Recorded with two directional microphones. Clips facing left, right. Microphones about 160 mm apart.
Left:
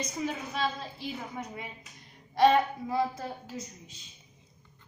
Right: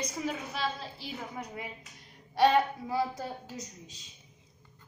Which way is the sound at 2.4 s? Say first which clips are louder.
Left 2 dB; 10° right (ahead or behind).